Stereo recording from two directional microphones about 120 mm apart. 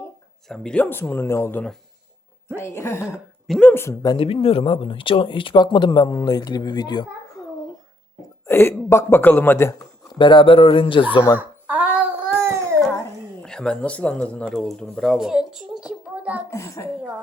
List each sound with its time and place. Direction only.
0.4 s speech: 5° left (ahead or behind); by 3.0 s 20° left (ahead or behind)
3.4 s speech: centre (ahead or behind)
3.7 s speech: 20° left (ahead or behind)
4.2 s speech: 50° left (ahead or behind); by 7.1 s 35° left (ahead or behind)
8.4 s speech: 20° left (ahead or behind)
10.2 s speech: 40° left (ahead or behind)
11.3 s a sound: 10° right (ahead or behind)
13.4 s speech: 5° left (ahead or behind); by 16.4 s 10° right (ahead or behind)
16.5 s speech: 25° left (ahead or behind)